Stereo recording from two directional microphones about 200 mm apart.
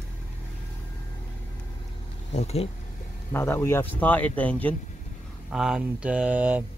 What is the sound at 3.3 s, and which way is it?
Speech, 10° left (ahead or behind).